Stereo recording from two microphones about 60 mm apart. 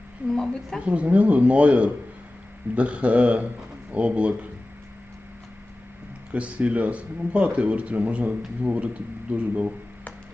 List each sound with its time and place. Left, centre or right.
0.3 s speech: centre
0.8 s speech: right
6.3 s speech: right